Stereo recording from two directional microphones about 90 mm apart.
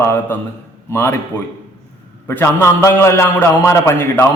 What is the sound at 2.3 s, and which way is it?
A man's voice, 25° left (ahead or behind).